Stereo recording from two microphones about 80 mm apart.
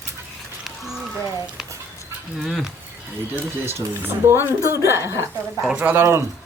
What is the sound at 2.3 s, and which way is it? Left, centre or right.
Speech, centre.